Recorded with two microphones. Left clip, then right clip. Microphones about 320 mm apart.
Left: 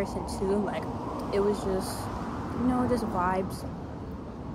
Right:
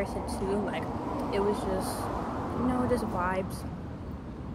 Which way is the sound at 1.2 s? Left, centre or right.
Centre.